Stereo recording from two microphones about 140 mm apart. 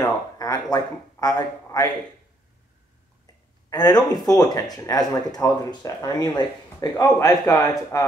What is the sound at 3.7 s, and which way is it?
Speech, 30° left (ahead or behind).